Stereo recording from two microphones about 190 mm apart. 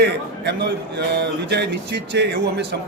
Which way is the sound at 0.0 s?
60° right (ahead or behind).